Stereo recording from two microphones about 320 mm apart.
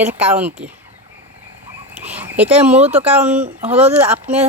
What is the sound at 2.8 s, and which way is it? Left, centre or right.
Speech, centre.